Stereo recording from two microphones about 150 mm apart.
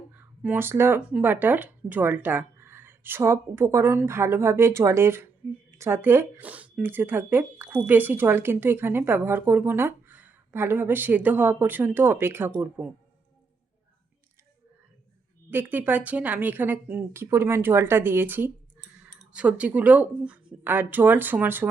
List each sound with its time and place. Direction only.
0.2 s speech: 10° right (ahead or behind)
15.4 s speech: 15° right (ahead or behind)